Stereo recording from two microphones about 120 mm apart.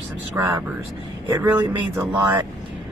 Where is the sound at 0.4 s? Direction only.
20° right (ahead or behind).